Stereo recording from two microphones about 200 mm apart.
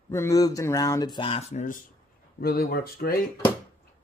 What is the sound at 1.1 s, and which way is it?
Speech, 30° left (ahead or behind).